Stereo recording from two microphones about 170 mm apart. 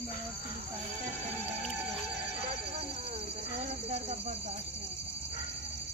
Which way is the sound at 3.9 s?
40° right (ahead or behind).